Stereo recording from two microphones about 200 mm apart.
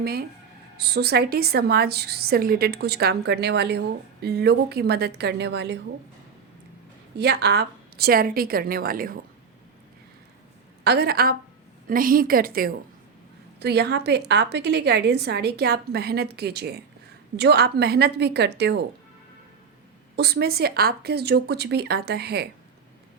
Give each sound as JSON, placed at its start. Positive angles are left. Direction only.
{"t": 0.0, "sound": "a woman's voice", "side_deg": -50}
{"t": 7.2, "sound": "a woman's voice", "side_deg": -55}
{"t": 10.8, "sound": "a woman's voice", "side_deg": -50}
{"t": 20.1, "sound": "a woman's voice", "side_deg": -55}